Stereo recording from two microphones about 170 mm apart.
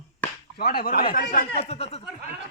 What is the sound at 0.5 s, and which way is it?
Speech, 65° left (ahead or behind).